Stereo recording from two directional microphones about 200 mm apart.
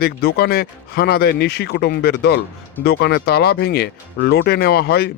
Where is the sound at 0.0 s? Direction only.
50° left (ahead or behind).